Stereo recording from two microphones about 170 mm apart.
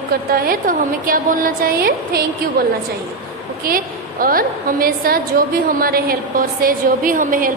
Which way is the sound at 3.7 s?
55° right (ahead or behind).